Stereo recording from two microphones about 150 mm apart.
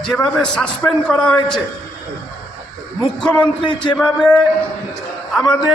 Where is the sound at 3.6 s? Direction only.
30° left (ahead or behind).